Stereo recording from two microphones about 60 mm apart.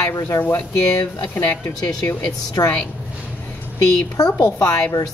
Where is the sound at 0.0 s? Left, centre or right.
Left.